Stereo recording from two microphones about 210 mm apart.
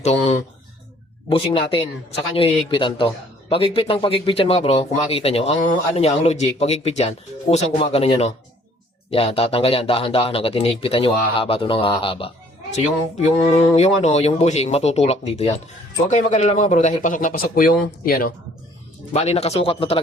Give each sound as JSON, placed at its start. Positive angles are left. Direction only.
{"t": 0.0, "sound": "speech", "side_deg": 30}
{"t": 13.5, "sound": "speech", "side_deg": 30}
{"t": 19.1, "sound": "speech", "side_deg": 30}